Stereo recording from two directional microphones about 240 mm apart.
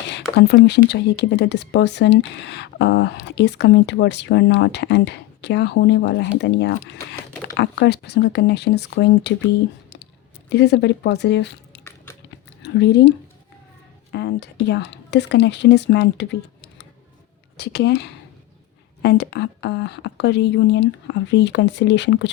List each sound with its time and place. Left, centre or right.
0.1 s speech: left
10.5 s speech: left